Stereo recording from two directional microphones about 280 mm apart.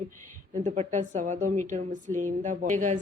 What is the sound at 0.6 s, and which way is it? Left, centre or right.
A woman's voice, right.